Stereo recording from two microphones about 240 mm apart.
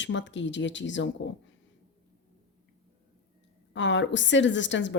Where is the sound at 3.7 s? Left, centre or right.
Left.